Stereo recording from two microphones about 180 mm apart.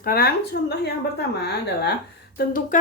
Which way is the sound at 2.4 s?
50° left (ahead or behind).